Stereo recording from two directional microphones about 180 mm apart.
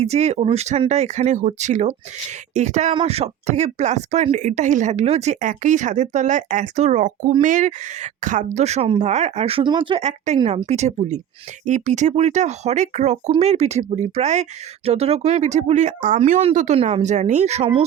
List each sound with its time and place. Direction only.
0.0 s speech: 40° right (ahead or behind)
2.9 s speech: 30° right (ahead or behind)